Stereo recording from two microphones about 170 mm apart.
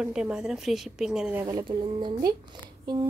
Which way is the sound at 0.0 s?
5° right (ahead or behind).